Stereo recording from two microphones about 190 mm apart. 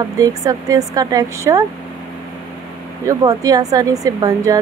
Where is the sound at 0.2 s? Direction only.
20° right (ahead or behind).